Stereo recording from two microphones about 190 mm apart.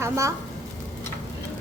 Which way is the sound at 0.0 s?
15° right (ahead or behind).